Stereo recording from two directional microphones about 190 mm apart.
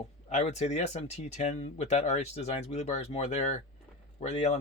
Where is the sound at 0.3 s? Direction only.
35° left (ahead or behind).